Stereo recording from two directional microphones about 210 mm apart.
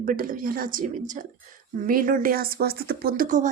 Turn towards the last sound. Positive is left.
turn(degrees=-40)  # may be behind; listen again after turning